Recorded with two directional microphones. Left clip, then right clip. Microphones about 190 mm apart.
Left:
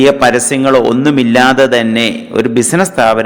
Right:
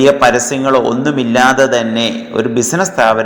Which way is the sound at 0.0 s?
25° left (ahead or behind).